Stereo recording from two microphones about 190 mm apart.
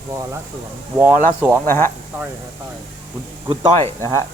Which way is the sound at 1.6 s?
10° left (ahead or behind).